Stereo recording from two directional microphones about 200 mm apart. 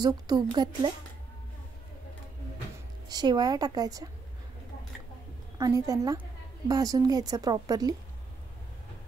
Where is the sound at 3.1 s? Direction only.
20° right (ahead or behind).